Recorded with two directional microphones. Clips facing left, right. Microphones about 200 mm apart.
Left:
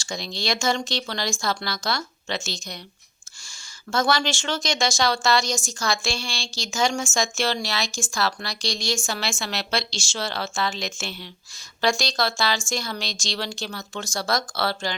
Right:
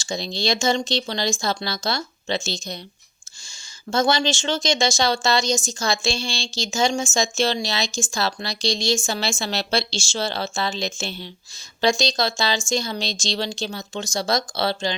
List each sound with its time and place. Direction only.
0.0 s speech: 25° right (ahead or behind)
3.9 s speech: 25° right (ahead or behind)